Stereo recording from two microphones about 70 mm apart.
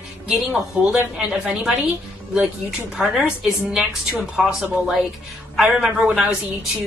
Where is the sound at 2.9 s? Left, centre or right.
Centre.